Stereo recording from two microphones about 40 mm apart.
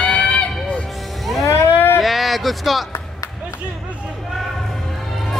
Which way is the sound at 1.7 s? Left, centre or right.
Left.